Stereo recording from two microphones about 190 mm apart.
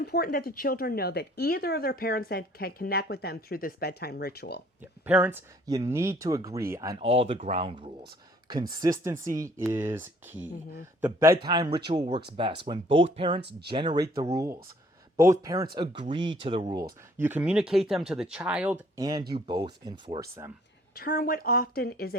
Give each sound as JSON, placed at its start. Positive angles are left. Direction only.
{"t": 0.0, "sound": "speech", "side_deg": 55}
{"t": 5.0, "sound": "speech", "side_deg": -10}
{"t": 7.0, "sound": "speech", "side_deg": -30}
{"t": 17.2, "sound": "speech", "side_deg": -10}
{"t": 18.9, "sound": "speech", "side_deg": -20}
{"t": 20.9, "sound": "speech", "side_deg": 55}